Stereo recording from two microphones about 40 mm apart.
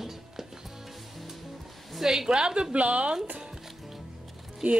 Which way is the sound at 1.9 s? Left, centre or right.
Centre.